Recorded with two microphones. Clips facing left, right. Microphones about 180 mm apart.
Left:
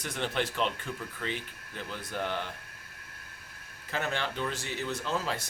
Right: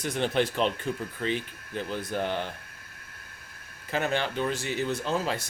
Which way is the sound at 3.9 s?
15° right (ahead or behind).